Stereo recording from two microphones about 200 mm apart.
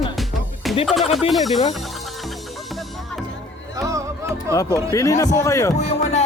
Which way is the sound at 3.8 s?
15° right (ahead or behind).